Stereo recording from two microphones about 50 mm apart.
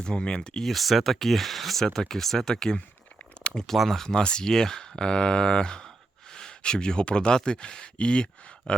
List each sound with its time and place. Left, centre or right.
0.0 s speech: centre
0.6 s speech: centre
3.4 s a sound: centre
3.8 s speech: centre